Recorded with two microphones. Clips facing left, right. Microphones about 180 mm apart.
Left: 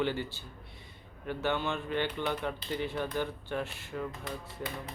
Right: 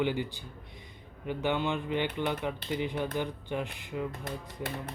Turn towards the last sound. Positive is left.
turn(degrees=-10)  # may be behind; listen again after turning